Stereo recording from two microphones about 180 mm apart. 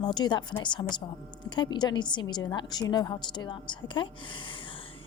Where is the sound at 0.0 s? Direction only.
25° left (ahead or behind).